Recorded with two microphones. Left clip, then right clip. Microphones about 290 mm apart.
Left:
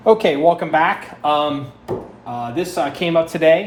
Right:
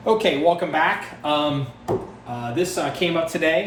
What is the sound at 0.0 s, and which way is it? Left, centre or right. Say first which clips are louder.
Speech: left 5 dB; left.